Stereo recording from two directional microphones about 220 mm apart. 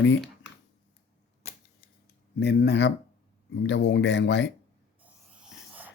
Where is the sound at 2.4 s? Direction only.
50° left (ahead or behind).